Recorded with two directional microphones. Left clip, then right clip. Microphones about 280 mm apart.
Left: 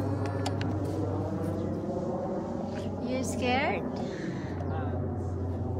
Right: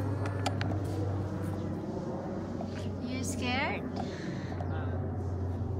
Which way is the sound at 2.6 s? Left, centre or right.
Centre.